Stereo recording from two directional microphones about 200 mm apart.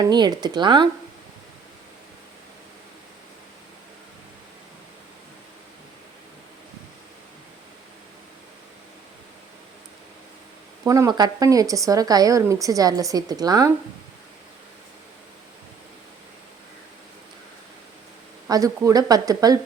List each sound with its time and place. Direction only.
0.0 s speech: 20° right (ahead or behind)
10.8 s speech: 15° right (ahead or behind)
18.4 s speech: 15° right (ahead or behind)